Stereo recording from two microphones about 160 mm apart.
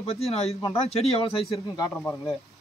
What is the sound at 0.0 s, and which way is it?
Speech, 40° left (ahead or behind).